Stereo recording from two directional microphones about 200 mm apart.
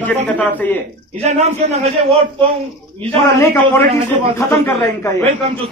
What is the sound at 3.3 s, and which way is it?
A man's voice, 15° left (ahead or behind).